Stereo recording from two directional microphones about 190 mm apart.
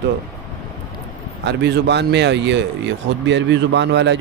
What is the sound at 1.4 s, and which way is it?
A man's voice, 65° right (ahead or behind).